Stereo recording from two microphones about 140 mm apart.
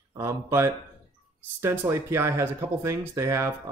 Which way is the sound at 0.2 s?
20° right (ahead or behind).